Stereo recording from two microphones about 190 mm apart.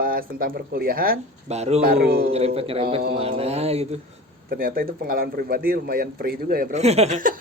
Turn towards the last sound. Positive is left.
turn(degrees=-40)  # may be behind; listen again after turning